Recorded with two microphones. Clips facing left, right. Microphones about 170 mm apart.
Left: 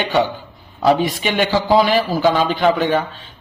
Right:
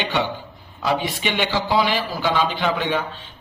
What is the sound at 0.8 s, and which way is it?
A man's voice, 45° left (ahead or behind).